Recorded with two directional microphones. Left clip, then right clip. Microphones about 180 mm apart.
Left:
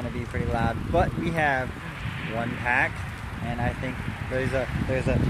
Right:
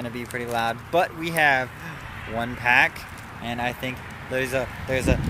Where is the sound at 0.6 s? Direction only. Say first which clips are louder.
Right 3 dB; 25° right (ahead or behind).